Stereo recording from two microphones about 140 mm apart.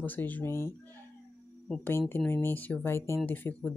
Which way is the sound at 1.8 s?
15° left (ahead or behind).